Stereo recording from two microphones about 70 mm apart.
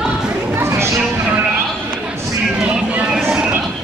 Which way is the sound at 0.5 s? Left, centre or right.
Right.